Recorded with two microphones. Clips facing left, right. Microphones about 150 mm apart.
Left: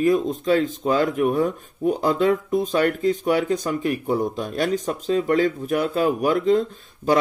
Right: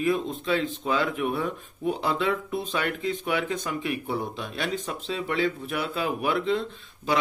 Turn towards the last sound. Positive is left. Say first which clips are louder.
# left 7 dB
turn(degrees=40)  # may be behind; listen again after turning